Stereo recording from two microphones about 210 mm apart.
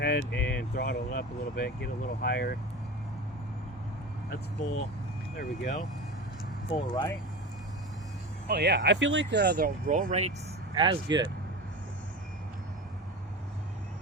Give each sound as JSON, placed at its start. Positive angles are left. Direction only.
{"t": 0.0, "sound": "vehicle", "side_deg": 50}
{"t": 0.5, "sound": "speech", "side_deg": 50}
{"t": 5.4, "sound": "speech", "side_deg": 40}
{"t": 6.7, "sound": "speech", "side_deg": 20}
{"t": 8.4, "sound": "speech", "side_deg": -50}
{"t": 10.8, "sound": "speech", "side_deg": -20}